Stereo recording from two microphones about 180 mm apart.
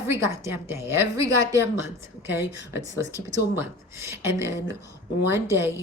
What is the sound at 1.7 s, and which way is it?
A woman's voice, 15° right (ahead or behind).